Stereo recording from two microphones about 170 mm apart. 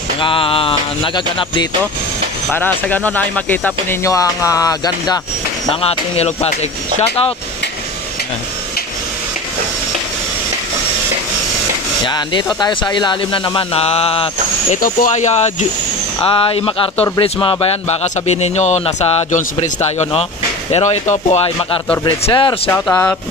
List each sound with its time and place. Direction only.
0.2 s speech: 30° left (ahead or behind)
2.5 s speech: 10° left (ahead or behind)
5.7 s speech: 35° left (ahead or behind)
12.1 s speech: 25° left (ahead or behind)
14.8 s speech: 50° left (ahead or behind)
16.2 s speech: 30° left (ahead or behind)
22.7 s speech: 10° left (ahead or behind)